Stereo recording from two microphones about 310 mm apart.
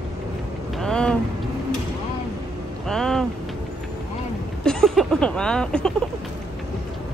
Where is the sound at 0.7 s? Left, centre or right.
Centre.